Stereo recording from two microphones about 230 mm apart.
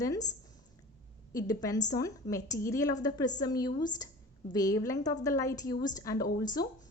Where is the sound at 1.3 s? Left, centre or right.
Centre.